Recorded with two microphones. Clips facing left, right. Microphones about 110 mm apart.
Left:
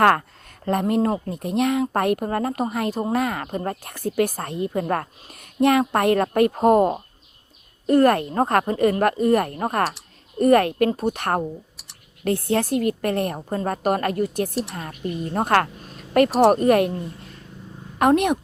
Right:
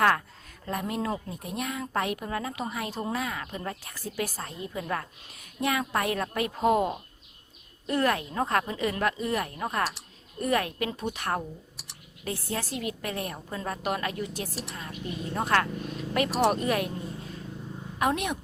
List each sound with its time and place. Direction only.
0.0 s a woman's voice: 55° left (ahead or behind)
11.2 s a woman's voice: 55° left (ahead or behind)
14.5 s a woman's voice: centre (ahead or behind)
14.8 s a woman's voice: 55° left (ahead or behind)